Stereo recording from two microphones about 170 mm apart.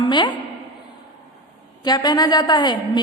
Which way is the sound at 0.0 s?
25° left (ahead or behind).